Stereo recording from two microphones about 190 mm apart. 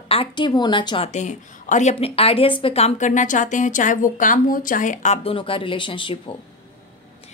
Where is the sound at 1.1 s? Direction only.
40° left (ahead or behind).